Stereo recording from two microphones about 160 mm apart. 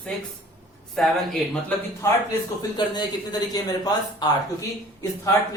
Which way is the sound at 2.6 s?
25° left (ahead or behind).